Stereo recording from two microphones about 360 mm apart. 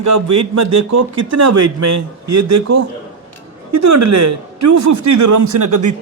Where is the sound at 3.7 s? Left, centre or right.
Right.